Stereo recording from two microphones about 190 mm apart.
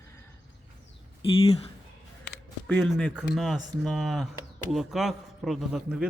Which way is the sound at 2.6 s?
10° left (ahead or behind).